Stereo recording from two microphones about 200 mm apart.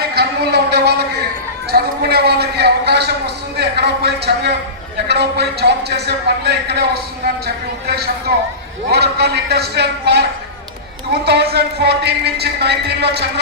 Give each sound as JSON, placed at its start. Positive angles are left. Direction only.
{"t": 0.0, "sound": "a sound", "side_deg": -55}
{"t": 5.0, "sound": "speech", "side_deg": -55}
{"t": 8.9, "sound": "speech", "side_deg": -55}